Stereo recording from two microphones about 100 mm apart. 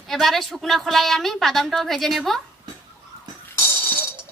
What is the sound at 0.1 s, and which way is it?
A woman's voice, 5° left (ahead or behind).